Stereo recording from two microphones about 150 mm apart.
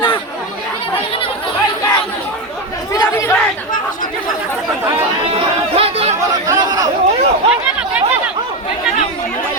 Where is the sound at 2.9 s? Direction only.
20° left (ahead or behind).